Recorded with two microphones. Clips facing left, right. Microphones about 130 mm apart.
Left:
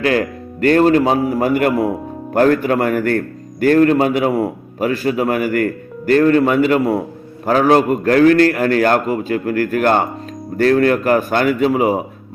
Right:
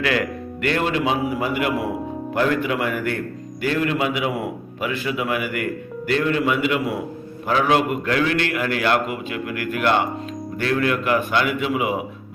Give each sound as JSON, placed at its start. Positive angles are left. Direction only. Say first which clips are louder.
{"t": 0.0, "sound": "a man's voice", "louder": "left 5 dB", "side_deg": 35}